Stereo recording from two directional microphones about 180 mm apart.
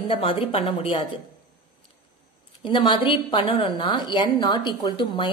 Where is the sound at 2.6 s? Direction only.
25° left (ahead or behind).